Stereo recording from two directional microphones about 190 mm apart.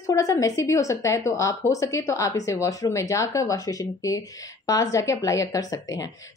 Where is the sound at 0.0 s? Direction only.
15° left (ahead or behind).